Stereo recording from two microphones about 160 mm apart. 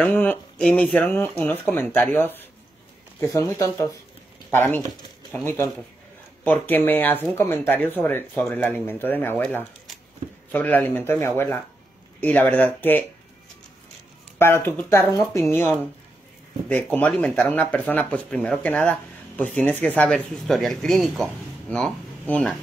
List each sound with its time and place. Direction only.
0.0 s speech: 10° left (ahead or behind)
14.4 s speech: 15° left (ahead or behind)
17.1 s speech: 5° left (ahead or behind)